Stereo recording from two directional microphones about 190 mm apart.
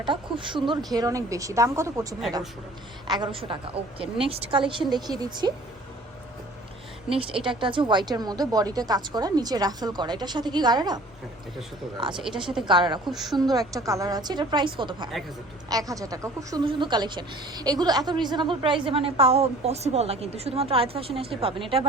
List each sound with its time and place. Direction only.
0.0 s a woman's voice: 25° right (ahead or behind)
7.4 s speech: 25° right (ahead or behind)
12.1 s a woman's voice: 5° right (ahead or behind)
12.6 s speech: 25° right (ahead or behind)
13.1 s a woman's voice: centre (ahead or behind)
13.4 s speech: 20° right (ahead or behind)